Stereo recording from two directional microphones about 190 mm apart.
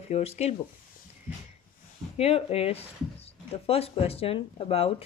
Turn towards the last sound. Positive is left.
turn(degrees=30)  # may be behind; listen again after turning